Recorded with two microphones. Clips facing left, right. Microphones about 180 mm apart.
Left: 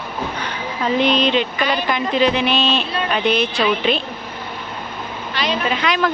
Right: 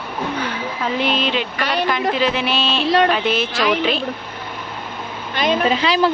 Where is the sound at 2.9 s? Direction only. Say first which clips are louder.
Right 9 dB; 90° right.